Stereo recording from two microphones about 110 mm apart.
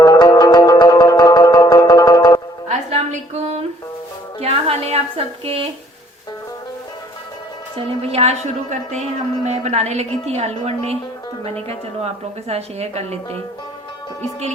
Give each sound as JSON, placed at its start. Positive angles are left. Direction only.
{"t": 0.0, "sound": "music", "side_deg": 40}
{"t": 2.6, "sound": "a sound", "side_deg": -80}
{"t": 4.4, "sound": "a woman's voice", "side_deg": -70}
{"t": 8.1, "sound": "a woman's voice", "side_deg": -70}
{"t": 9.5, "sound": "a woman's voice", "side_deg": -80}